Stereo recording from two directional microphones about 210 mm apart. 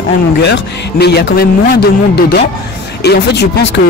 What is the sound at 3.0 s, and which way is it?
Speech, 50° left (ahead or behind).